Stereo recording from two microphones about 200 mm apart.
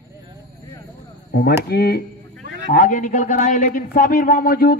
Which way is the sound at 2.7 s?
40° left (ahead or behind).